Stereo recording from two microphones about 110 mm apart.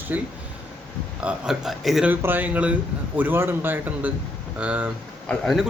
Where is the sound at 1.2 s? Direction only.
10° right (ahead or behind).